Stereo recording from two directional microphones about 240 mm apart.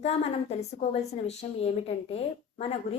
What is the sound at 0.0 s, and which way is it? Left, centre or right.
Speech, left.